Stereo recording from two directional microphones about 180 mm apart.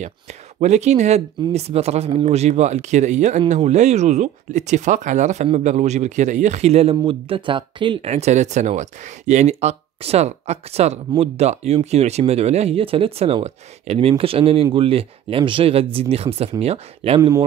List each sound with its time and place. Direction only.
0.6 s speech: 40° right (ahead or behind)